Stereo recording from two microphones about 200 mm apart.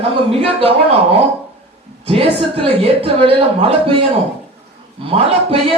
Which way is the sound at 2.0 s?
30° right (ahead or behind).